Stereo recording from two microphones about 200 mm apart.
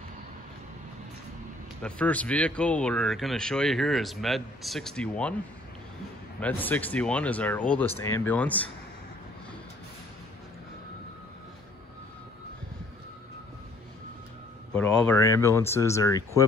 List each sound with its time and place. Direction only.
1.8 s speech: 5° left (ahead or behind)
6.4 s speech: 10° left (ahead or behind)
14.7 s speech: 5° left (ahead or behind)